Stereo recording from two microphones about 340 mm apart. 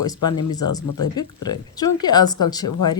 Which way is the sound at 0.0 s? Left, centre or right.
Centre.